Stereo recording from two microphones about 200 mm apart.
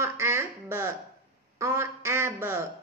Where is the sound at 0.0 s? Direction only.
10° right (ahead or behind).